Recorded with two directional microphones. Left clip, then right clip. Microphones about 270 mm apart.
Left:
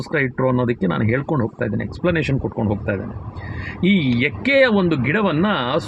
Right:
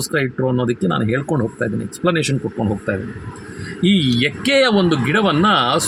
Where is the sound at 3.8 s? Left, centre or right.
Centre.